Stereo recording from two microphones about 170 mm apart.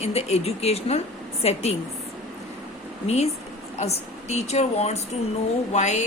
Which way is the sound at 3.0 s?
40° left (ahead or behind).